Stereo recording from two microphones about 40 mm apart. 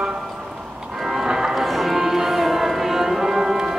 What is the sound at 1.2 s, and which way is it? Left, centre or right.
Music, centre.